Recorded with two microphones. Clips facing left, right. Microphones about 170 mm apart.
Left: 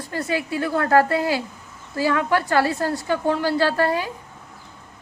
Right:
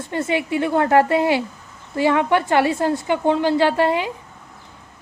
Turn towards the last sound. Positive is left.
turn(degrees=-20)  # may be behind; listen again after turning